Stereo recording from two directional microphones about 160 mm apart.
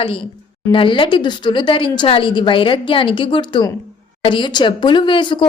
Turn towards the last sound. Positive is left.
turn(degrees=30)  # may be behind; listen again after turning